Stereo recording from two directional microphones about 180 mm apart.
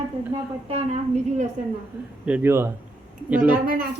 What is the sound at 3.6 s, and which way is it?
Speech, 50° right (ahead or behind).